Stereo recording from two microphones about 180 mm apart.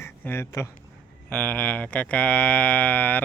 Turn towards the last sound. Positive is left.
turn(degrees=10)  # may be behind; listen again after turning